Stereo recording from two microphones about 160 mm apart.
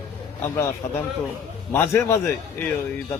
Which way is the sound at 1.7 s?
15° left (ahead or behind).